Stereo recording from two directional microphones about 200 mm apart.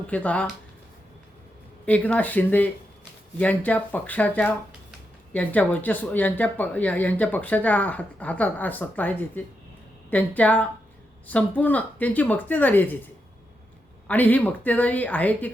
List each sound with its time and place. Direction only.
0.1 s speech: 5° left (ahead or behind)
1.8 s speech: 5° left (ahead or behind)
14.1 s speech: 10° left (ahead or behind)